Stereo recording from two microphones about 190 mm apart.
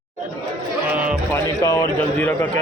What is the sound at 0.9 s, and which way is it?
Speech, 5° right (ahead or behind).